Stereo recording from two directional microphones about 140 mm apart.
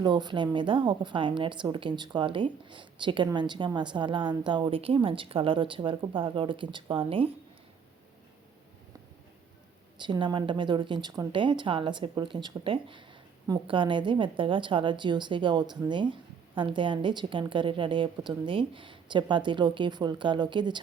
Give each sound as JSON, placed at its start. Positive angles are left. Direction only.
{"t": 0.0, "sound": "a woman's voice", "side_deg": -30}
{"t": 10.0, "sound": "a woman's voice", "side_deg": -35}